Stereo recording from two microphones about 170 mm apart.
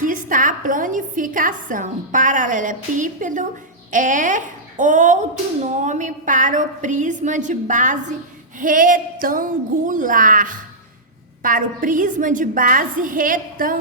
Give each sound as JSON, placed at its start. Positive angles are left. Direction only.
{"t": 0.0, "sound": "a woman's voice", "side_deg": -50}